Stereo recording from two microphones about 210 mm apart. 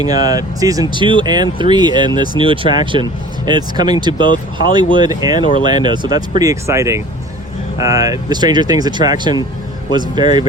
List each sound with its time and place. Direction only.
0.0 s speech: 20° right (ahead or behind)